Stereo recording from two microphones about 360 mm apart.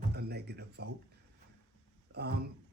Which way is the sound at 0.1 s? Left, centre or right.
Right.